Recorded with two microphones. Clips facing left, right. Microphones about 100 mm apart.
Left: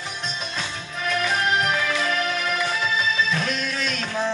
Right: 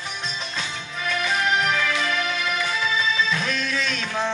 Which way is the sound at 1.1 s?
45° left (ahead or behind).